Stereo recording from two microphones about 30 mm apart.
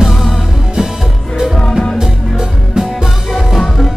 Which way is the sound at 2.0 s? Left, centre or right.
Centre.